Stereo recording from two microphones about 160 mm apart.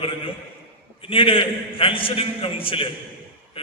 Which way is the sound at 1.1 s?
35° left (ahead or behind).